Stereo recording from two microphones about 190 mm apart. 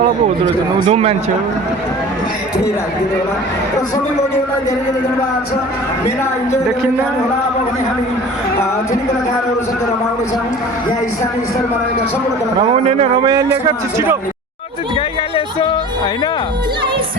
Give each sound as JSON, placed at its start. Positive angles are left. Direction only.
{"t": 0.8, "sound": "speech", "side_deg": -30}
{"t": 12.7, "sound": "speech", "side_deg": -30}
{"t": 13.3, "sound": "a man's voice", "side_deg": -20}